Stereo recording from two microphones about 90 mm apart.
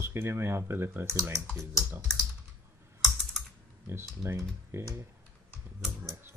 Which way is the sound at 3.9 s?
25° right (ahead or behind).